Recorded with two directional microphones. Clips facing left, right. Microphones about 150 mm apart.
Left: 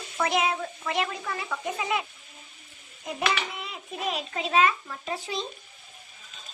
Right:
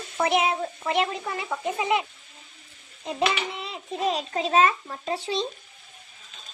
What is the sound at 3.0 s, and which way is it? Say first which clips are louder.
A child's voice: right 3 dB; 30° right (ahead or behind).